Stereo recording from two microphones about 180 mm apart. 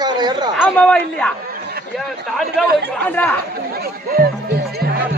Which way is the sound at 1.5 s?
55° right (ahead or behind).